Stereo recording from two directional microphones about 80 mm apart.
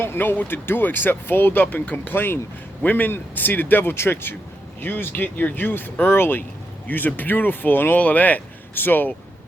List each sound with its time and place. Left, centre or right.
0.0 s speech: left